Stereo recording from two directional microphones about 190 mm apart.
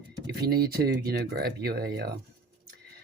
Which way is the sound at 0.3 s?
55° right (ahead or behind).